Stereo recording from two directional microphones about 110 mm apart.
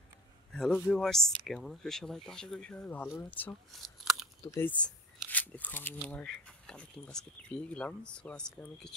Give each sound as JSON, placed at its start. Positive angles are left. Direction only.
{"t": 0.5, "sound": "a sound", "side_deg": 5}
{"t": 0.9, "sound": "speech", "side_deg": 5}
{"t": 3.8, "sound": "crunch", "side_deg": 0}
{"t": 4.6, "sound": "speech", "side_deg": 15}